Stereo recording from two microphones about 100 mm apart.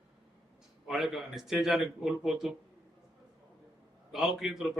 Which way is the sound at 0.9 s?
Centre (ahead or behind).